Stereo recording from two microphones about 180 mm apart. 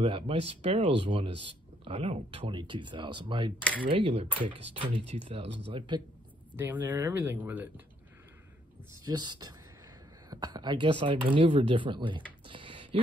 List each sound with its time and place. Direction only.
0.0 s speech: 30° right (ahead or behind)
6.5 s speech: 10° right (ahead or behind)
9.0 s speech: 25° right (ahead or behind)